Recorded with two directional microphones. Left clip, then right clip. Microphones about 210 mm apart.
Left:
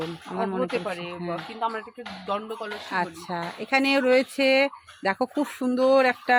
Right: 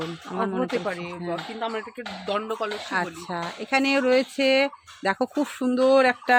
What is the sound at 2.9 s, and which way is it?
Speech, centre (ahead or behind).